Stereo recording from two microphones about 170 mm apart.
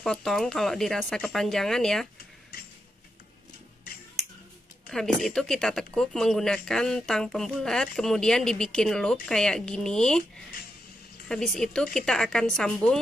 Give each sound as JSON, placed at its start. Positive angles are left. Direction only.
{"t": 0.0, "sound": "speech", "side_deg": 0}
{"t": 4.8, "sound": "speech", "side_deg": 0}
{"t": 11.2, "sound": "speech", "side_deg": 5}